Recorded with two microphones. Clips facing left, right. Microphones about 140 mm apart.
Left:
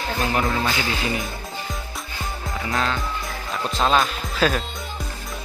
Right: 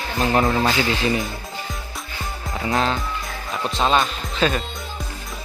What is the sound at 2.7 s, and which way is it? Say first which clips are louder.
Speech: right 3 dB; 25° right (ahead or behind).